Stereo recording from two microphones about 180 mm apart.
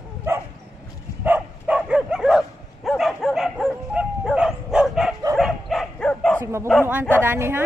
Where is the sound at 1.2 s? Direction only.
10° right (ahead or behind).